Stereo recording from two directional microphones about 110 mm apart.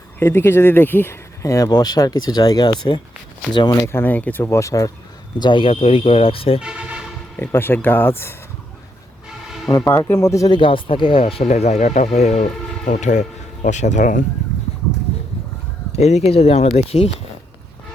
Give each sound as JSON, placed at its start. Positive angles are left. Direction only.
{"t": 0.2, "sound": "speech", "side_deg": 20}
{"t": 3.8, "sound": "speech", "side_deg": 20}
{"t": 5.4, "sound": "speech", "side_deg": 50}
{"t": 6.6, "sound": "a sound", "side_deg": -5}
{"t": 7.3, "sound": "speech", "side_deg": 20}
{"t": 9.6, "sound": "speech", "side_deg": 30}
{"t": 10.5, "sound": "speech", "side_deg": 50}
{"t": 15.9, "sound": "speech", "side_deg": 85}